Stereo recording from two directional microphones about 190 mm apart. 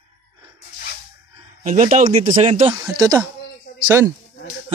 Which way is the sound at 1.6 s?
40° right (ahead or behind).